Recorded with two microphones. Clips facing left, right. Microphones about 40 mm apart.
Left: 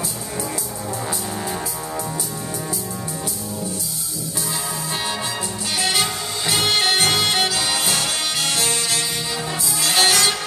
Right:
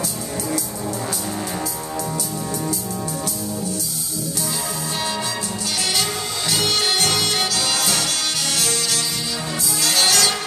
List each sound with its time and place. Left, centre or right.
6.5 s music: left